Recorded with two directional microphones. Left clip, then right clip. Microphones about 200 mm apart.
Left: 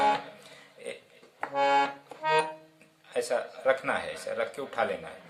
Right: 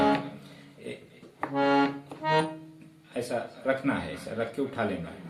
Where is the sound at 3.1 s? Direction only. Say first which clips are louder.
Left 3 dB; 50° left (ahead or behind).